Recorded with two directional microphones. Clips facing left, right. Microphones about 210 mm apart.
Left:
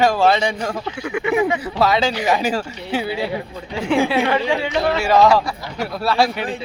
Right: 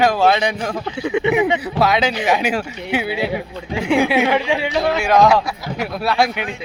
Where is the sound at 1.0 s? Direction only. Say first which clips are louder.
Right 2 dB; 20° right (ahead or behind).